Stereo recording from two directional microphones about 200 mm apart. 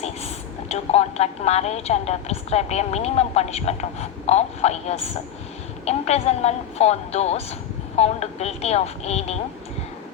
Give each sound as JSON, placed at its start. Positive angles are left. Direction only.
{"t": 0.7, "sound": "a woman's voice", "side_deg": 30}